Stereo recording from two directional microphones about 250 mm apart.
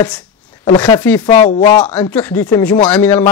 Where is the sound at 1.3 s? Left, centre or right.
Left.